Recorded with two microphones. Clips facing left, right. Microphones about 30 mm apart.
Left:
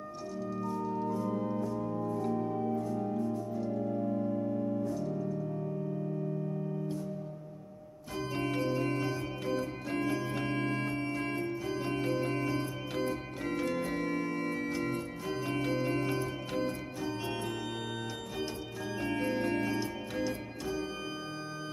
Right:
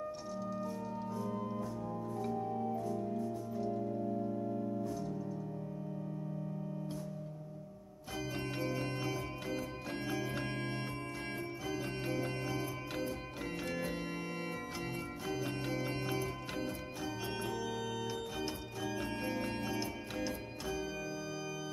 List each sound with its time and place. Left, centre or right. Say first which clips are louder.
0.5 s organ: left 8 dB; centre
1.8 s music: left 6 dB; left
2.3 s organ: left 4 dB; left
2.9 s music: left 4 dB; centre
3.8 s music: left 5 dB; left
4.8 s music: left 5 dB; centre
8.5 s music: left 6 dB; centre
14.0 s music: left 7 dB; centre
14.7 s music: left 7 dB; centre
18.9 s music: left 8 dB; centre